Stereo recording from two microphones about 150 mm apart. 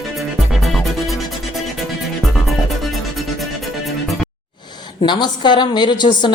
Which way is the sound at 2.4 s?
Centre (ahead or behind).